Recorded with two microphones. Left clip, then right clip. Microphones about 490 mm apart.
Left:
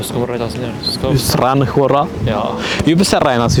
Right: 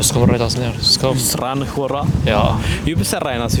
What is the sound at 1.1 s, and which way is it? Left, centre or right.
Speech, left.